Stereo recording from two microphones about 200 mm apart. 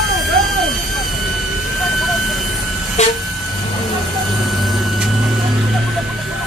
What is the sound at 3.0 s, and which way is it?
Vehicle, 35° left (ahead or behind).